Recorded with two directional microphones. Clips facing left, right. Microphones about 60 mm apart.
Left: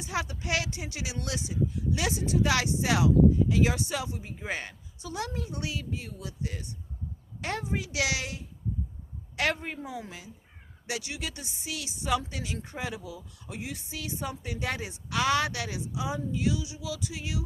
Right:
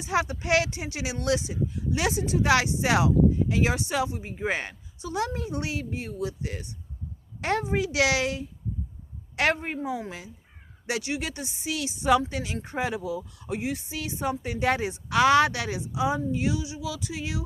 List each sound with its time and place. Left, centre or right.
0.1 s a woman's voice: right
5.0 s a woman's voice: right
9.6 s speech: right
11.6 s a woman's voice: right
15.7 s speech: right